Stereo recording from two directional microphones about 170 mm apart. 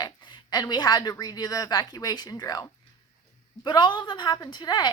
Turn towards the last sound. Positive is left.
turn(degrees=25)  # may be behind; listen again after turning